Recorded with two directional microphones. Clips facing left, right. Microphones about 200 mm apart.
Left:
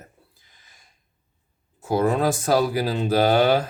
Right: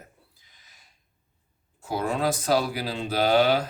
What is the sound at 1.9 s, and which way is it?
Speech, 50° left (ahead or behind).